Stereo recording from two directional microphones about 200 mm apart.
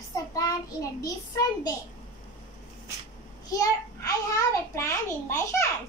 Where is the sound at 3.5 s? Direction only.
15° left (ahead or behind).